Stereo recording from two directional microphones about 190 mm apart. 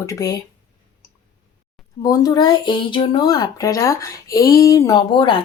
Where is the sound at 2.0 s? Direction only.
20° left (ahead or behind).